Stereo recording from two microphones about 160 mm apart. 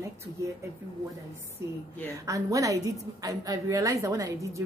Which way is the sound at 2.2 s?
20° right (ahead or behind).